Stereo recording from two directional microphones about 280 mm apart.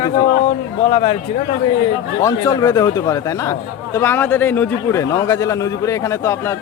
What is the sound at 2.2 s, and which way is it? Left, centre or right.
A man's voice, centre.